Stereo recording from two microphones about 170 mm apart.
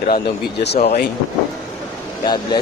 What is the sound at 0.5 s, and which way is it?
Speech, 75° left (ahead or behind).